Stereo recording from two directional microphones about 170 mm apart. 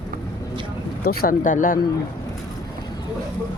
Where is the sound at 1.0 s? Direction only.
65° left (ahead or behind).